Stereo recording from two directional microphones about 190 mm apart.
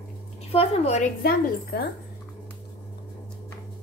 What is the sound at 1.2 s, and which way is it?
Speech, 55° left (ahead or behind).